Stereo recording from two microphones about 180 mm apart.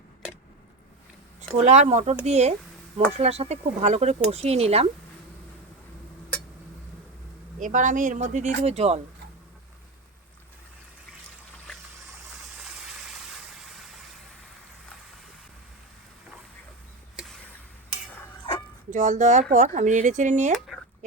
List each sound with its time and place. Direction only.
1.5 s speech: 40° right (ahead or behind)
7.6 s speech: 45° right (ahead or behind)
11.7 s a sound: 5° left (ahead or behind)
12.3 s vehicle: 5° right (ahead or behind)
17.2 s a sound: centre (ahead or behind)
18.9 s speech: 40° right (ahead or behind)